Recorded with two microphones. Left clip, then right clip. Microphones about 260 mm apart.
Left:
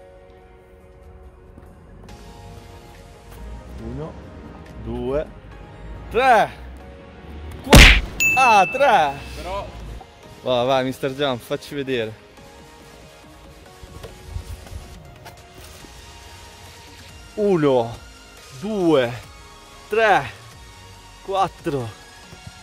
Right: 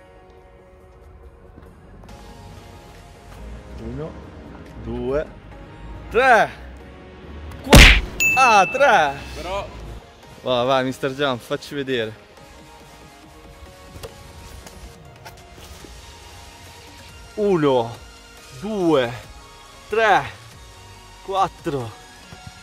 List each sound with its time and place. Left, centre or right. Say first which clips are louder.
4.9 s speech: right 1 dB; centre
7.6 s ding: even; centre
9.4 s a sound: right 3 dB; right
10.4 s speech: even; centre
17.4 s speech: even; centre